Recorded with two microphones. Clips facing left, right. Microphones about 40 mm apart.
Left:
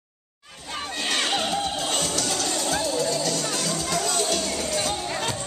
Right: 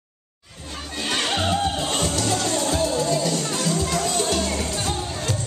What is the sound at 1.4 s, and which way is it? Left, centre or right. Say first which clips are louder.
Music: right 3 dB; right.